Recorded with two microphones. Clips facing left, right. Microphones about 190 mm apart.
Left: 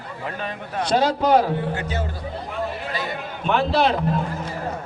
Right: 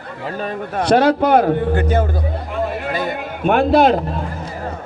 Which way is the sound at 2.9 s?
50° right (ahead or behind).